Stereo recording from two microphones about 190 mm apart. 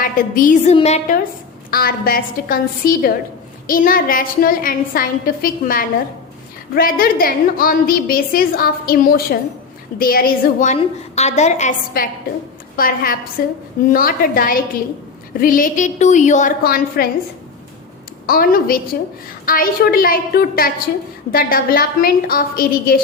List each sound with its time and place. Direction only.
0.0 s a woman's voice: 45° left (ahead or behind)
1.7 s a woman's voice: 50° left (ahead or behind)
12.7 s a woman's voice: 50° left (ahead or behind)
18.3 s a woman's voice: 50° left (ahead or behind)